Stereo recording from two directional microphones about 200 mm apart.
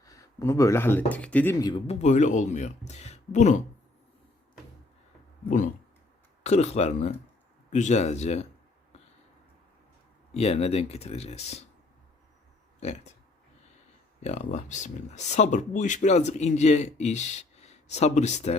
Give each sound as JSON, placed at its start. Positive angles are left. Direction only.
{"t": 0.0, "sound": "speech", "side_deg": 15}
{"t": 1.9, "sound": "speech", "side_deg": 35}
{"t": 5.5, "sound": "speech", "side_deg": 40}
{"t": 10.3, "sound": "speech", "side_deg": 30}
{"t": 14.2, "sound": "speech", "side_deg": 35}